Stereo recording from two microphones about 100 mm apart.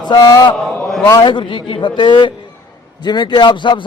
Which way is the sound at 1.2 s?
50° left (ahead or behind).